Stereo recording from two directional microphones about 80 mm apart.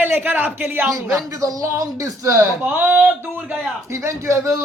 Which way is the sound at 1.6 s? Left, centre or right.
Right.